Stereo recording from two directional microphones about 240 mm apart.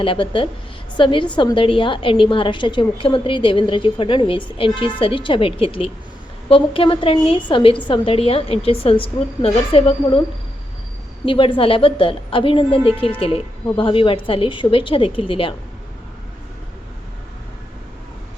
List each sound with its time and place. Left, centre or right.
0.0 s a woman's voice: left
11.3 s a woman's voice: left